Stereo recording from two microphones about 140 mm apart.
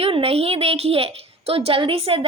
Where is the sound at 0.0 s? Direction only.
45° right (ahead or behind).